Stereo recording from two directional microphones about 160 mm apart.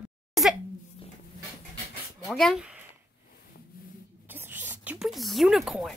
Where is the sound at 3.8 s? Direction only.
65° left (ahead or behind).